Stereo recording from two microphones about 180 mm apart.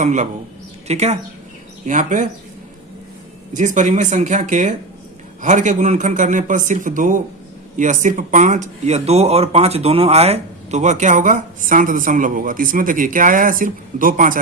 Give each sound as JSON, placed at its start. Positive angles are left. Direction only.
{"t": 0.0, "sound": "speech", "side_deg": -45}
{"t": 3.5, "sound": "speech", "side_deg": -45}